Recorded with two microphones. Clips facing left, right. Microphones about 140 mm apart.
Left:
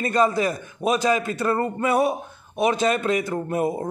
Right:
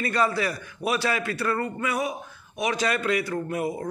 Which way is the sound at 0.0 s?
20° left (ahead or behind).